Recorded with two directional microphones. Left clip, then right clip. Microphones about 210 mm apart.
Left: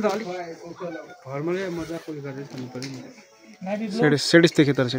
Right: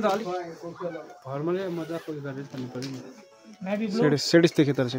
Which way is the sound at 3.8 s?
5° left (ahead or behind).